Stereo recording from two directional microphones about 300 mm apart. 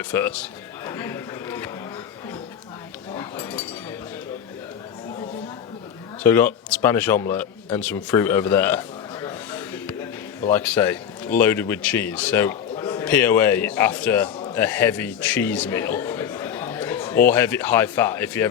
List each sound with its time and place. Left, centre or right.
0.0 s a man's voice: centre
0.9 s a sound: centre
3.1 s chink: centre
6.2 s a man's voice: centre
14.3 s a sound: centre
14.6 s a man's voice: centre